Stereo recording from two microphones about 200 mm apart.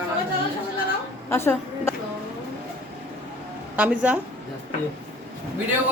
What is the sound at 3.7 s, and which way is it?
Speech, 5° right (ahead or behind).